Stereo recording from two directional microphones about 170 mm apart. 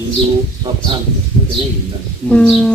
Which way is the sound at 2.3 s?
5° left (ahead or behind).